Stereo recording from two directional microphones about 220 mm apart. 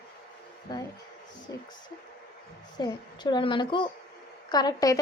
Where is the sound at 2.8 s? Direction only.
20° left (ahead or behind).